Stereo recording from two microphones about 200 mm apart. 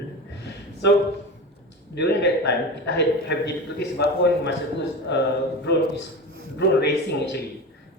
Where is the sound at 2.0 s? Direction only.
55° left (ahead or behind).